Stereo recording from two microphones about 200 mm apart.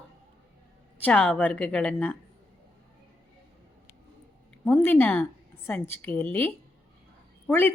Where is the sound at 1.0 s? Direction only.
5° left (ahead or behind).